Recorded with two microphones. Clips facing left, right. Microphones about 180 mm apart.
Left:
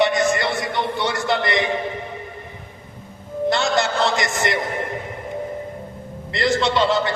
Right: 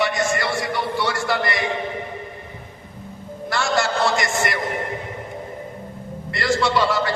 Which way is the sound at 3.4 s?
20° left (ahead or behind).